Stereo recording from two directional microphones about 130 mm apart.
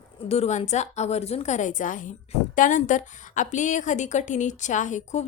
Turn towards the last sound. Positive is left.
turn(degrees=65)  # may be behind; listen again after turning